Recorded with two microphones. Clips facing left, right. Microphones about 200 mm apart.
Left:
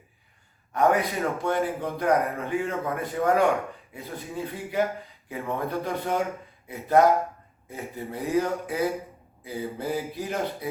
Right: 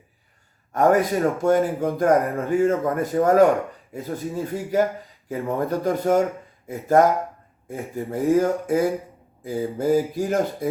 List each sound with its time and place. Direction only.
0.7 s a man's voice: 45° right (ahead or behind)